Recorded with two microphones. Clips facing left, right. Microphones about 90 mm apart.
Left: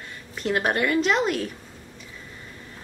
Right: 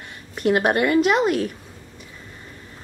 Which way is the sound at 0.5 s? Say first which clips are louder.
Right 5 dB; 5° right (ahead or behind).